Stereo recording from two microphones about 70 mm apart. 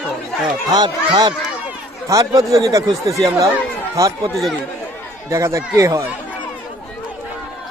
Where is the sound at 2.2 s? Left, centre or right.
Right.